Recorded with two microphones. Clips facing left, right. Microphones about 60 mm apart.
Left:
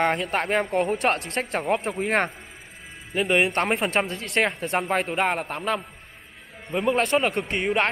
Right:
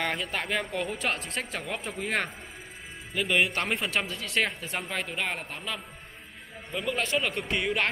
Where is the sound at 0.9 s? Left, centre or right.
Left.